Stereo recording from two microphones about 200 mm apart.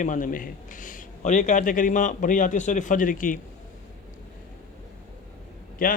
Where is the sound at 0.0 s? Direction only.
40° left (ahead or behind).